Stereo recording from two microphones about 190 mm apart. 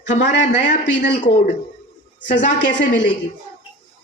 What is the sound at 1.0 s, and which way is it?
Speech, 40° left (ahead or behind).